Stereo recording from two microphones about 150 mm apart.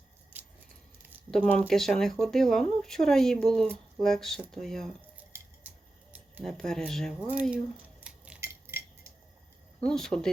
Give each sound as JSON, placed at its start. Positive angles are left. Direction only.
{"t": 1.3, "sound": "speech", "side_deg": 5}
{"t": 5.1, "sound": "a sound", "side_deg": -10}
{"t": 6.4, "sound": "speech", "side_deg": 5}
{"t": 8.0, "sound": "scissors", "side_deg": -10}
{"t": 8.4, "sound": "keys jangling", "side_deg": -15}
{"t": 9.8, "sound": "speech", "side_deg": 5}